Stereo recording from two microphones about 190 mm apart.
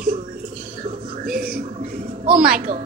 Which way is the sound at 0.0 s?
45° right (ahead or behind).